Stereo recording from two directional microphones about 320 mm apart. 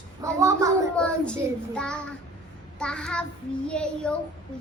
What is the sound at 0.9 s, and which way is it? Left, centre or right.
A child's voice, centre.